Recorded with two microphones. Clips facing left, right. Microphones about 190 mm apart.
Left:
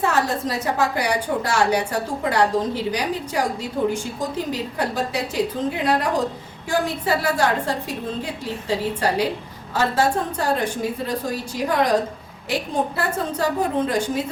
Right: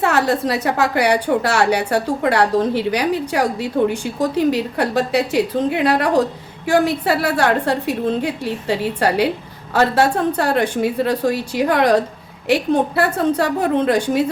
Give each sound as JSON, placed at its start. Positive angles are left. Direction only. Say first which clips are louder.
{"t": 0.0, "sound": "a woman's voice", "louder": "right 4 dB", "side_deg": -70}